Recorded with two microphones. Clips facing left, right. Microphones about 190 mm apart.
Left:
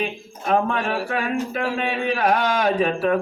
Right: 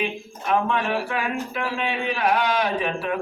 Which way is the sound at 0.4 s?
45° left (ahead or behind).